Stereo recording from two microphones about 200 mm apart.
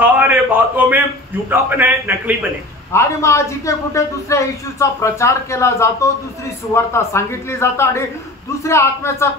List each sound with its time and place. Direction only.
0.0 s a man's voice: 10° right (ahead or behind)
2.9 s a man's voice: 15° left (ahead or behind)